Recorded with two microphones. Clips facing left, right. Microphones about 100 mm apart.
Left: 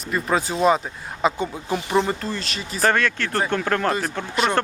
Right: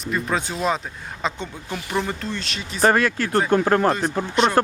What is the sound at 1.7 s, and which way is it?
Speech, 25° left (ahead or behind).